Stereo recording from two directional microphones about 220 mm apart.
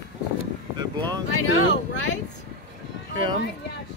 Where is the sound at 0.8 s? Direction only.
20° right (ahead or behind).